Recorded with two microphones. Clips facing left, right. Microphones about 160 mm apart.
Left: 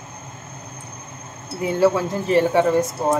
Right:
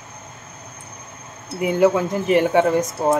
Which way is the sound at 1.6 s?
20° right (ahead or behind).